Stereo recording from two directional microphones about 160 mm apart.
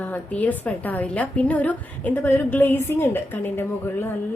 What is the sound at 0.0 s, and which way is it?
A woman's voice, 10° left (ahead or behind).